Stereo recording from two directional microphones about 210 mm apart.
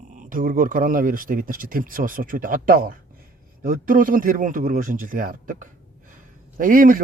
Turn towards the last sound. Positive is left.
turn(degrees=-40)  # may be behind; listen again after turning